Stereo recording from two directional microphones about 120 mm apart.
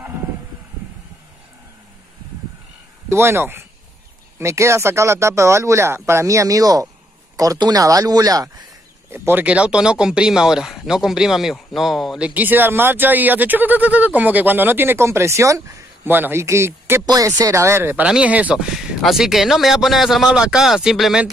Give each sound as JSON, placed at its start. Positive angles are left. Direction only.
{"t": 3.1, "sound": "speech", "side_deg": -20}
{"t": 9.1, "sound": "speech", "side_deg": -20}
{"t": 12.4, "sound": "speech", "side_deg": -15}
{"t": 17.0, "sound": "speech", "side_deg": -30}